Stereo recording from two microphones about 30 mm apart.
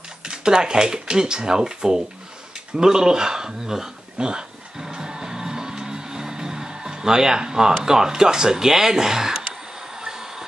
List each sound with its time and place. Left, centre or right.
0.2 s speech: right
4.2 s speech: right
4.7 s music: centre
7.8 s speech: centre
9.9 s train: right